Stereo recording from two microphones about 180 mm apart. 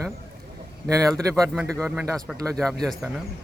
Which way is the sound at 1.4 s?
10° right (ahead or behind).